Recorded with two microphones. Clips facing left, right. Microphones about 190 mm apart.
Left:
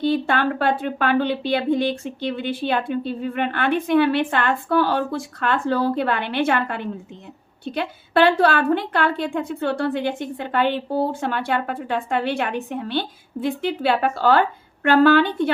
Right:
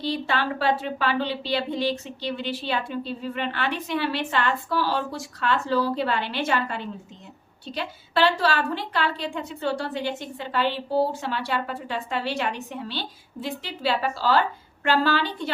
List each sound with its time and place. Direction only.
0.0 s a woman's voice: 55° left (ahead or behind)